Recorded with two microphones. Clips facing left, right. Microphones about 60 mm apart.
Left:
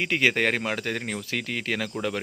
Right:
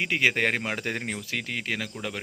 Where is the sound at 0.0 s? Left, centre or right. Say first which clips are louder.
Left 1 dB; centre.